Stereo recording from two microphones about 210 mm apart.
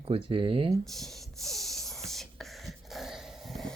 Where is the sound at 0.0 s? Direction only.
25° right (ahead or behind).